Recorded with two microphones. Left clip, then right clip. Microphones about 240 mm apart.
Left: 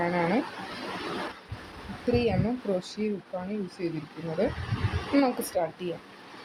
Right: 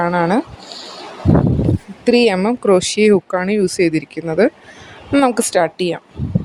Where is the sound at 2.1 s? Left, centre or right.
Right.